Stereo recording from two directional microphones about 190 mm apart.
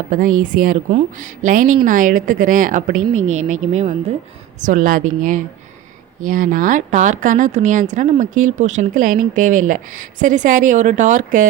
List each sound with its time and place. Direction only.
0.1 s speech: 45° right (ahead or behind)